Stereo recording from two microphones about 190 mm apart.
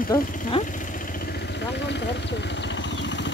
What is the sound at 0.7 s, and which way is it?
Vehicle, 45° left (ahead or behind).